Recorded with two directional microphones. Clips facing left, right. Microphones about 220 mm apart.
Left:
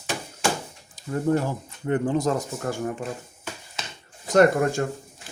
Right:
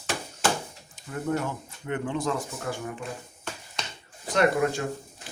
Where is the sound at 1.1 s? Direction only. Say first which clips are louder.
Left 6 dB; 35° left (ahead or behind).